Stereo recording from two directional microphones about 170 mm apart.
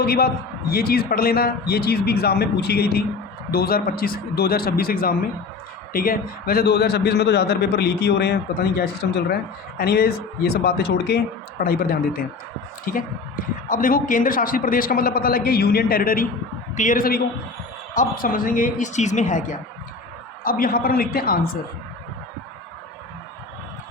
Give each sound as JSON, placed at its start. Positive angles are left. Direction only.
{"t": 0.0, "sound": "a woman's voice", "side_deg": 65}
{"t": 11.6, "sound": "a woman's voice", "side_deg": 60}